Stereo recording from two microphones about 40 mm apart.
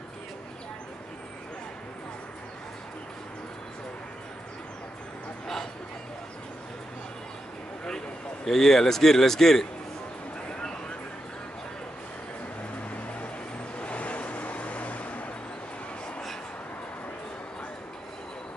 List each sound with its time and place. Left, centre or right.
8.5 s a man's voice: centre
10.5 s a sound: centre
13.7 s vehicle: left